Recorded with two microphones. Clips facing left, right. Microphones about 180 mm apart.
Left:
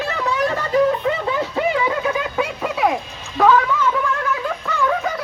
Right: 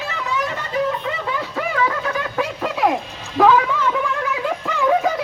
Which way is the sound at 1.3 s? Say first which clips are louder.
Left 3 dB; 25° left (ahead or behind).